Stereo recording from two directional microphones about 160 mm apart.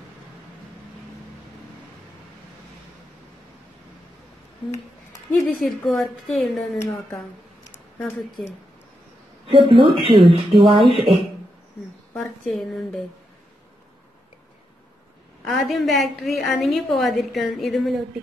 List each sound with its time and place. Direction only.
5.5 s a woman's voice: centre (ahead or behind)
6.8 s speech: 15° left (ahead or behind)
9.5 s speech: 35° right (ahead or behind)
12.5 s a woman's voice: centre (ahead or behind)
15.4 s a woman's voice: centre (ahead or behind)